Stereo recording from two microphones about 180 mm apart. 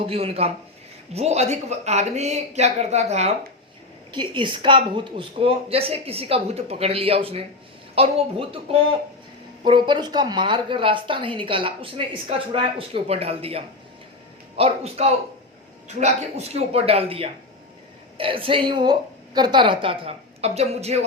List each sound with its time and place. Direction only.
0.0 s a woman's voice: 35° right (ahead or behind)
4.1 s a woman's voice: 25° right (ahead or behind)